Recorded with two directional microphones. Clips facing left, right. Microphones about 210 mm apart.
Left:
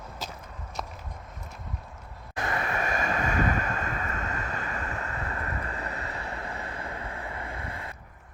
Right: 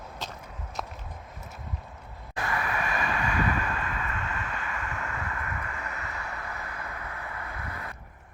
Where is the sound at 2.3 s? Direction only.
25° left (ahead or behind).